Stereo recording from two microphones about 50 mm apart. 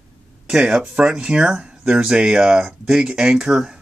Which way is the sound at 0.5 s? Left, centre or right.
Centre.